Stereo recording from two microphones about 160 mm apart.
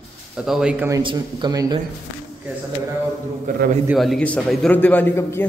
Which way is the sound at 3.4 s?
60° right (ahead or behind).